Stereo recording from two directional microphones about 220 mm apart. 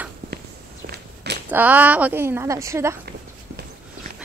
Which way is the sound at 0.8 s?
45° right (ahead or behind).